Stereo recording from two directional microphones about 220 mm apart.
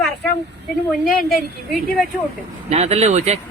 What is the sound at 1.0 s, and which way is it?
Speech, 40° left (ahead or behind).